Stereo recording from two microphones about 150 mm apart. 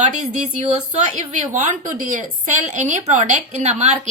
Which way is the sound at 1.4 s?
55° right (ahead or behind).